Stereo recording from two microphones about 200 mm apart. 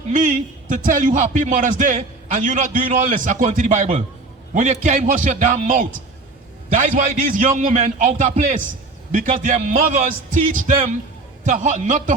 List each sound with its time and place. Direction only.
0.1 s a man's voice: 40° right (ahead or behind)
11.4 s a man's voice: 40° right (ahead or behind)